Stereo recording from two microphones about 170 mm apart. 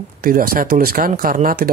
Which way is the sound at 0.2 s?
60° right (ahead or behind).